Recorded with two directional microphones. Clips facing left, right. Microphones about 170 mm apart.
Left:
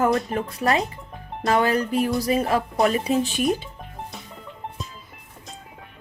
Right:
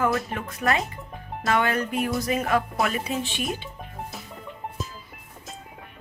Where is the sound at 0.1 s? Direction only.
Centre (ahead or behind).